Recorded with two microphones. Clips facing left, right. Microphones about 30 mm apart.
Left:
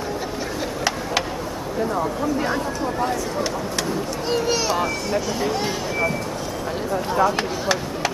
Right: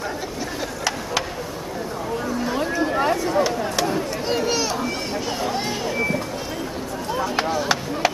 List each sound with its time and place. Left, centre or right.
3.0 s a sound: right
4.3 s speech: centre
7.3 s chop: centre